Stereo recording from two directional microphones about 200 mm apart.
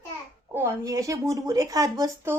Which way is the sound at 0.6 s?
15° right (ahead or behind).